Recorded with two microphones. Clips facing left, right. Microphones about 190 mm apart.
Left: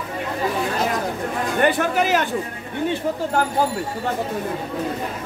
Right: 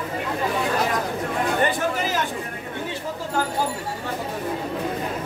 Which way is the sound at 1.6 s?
65° left (ahead or behind).